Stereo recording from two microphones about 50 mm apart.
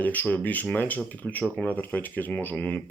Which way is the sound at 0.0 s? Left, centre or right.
Left.